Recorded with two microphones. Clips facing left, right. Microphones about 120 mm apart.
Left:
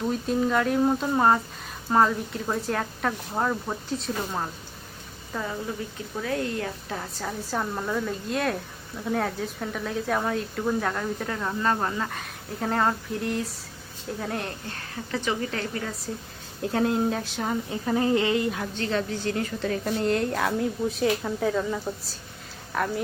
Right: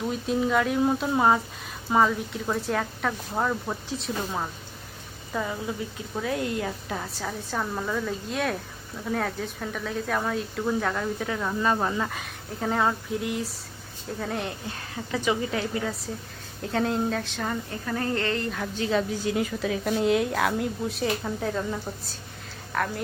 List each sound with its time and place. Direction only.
0.1 s a woman's voice: centre (ahead or behind)
6.2 s speech: 15° right (ahead or behind)
6.9 s a woman's voice: 5° left (ahead or behind)
15.1 s speech: 15° right (ahead or behind)
16.6 s a sound: centre (ahead or behind)
18.8 s a woman's voice: 10° right (ahead or behind)